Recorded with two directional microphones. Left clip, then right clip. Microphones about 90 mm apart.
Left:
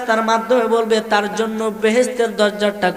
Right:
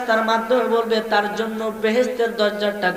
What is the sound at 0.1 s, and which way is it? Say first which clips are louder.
A man's voice: left 3 dB; 40° left (ahead or behind).